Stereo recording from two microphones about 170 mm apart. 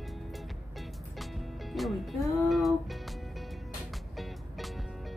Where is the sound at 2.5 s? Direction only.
Centre (ahead or behind).